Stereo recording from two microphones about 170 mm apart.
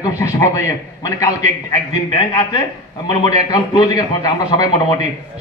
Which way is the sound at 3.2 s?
20° left (ahead or behind).